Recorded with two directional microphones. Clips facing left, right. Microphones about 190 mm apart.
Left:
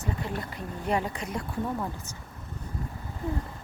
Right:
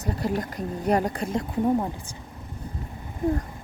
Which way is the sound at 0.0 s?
40° right (ahead or behind).